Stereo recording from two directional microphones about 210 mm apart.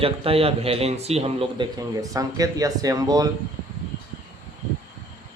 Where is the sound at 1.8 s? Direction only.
15° right (ahead or behind).